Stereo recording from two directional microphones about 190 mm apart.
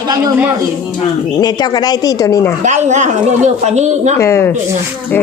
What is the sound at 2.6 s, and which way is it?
Speech, 40° right (ahead or behind).